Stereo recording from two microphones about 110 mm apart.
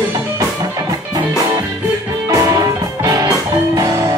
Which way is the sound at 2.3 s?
30° right (ahead or behind).